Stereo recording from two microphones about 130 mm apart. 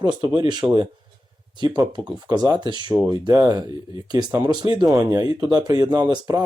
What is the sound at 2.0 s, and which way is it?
Speech, 30° right (ahead or behind).